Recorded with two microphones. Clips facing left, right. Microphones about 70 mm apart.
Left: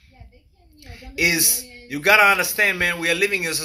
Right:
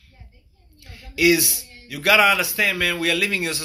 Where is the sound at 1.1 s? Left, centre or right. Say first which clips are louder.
Right 5 dB; left.